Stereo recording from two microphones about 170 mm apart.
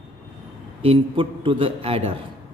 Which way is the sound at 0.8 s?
30° right (ahead or behind).